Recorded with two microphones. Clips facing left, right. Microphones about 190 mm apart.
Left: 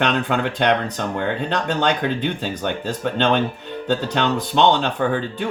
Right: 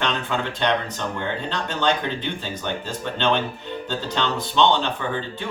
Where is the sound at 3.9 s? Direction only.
55° left (ahead or behind).